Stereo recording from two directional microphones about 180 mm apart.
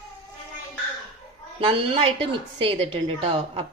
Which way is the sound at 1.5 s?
30° right (ahead or behind).